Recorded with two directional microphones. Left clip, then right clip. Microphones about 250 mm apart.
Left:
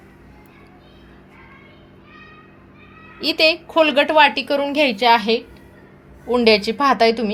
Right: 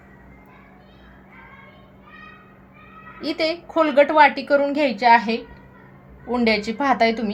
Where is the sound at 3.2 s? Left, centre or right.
Left.